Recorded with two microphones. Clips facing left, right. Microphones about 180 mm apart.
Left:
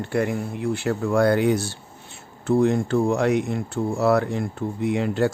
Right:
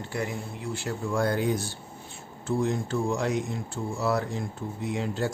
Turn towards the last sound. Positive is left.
turn(degrees=65)  # may be behind; listen again after turning